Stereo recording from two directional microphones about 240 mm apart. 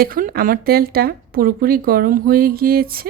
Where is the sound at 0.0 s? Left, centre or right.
Right.